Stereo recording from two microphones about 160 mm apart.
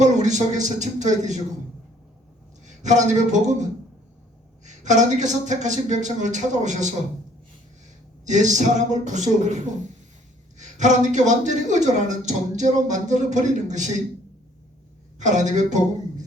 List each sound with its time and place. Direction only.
0.0 s speech: 50° right (ahead or behind)
2.6 s a man's voice: 50° right (ahead or behind)
8.2 s speech: 50° right (ahead or behind)
15.2 s speech: 50° right (ahead or behind)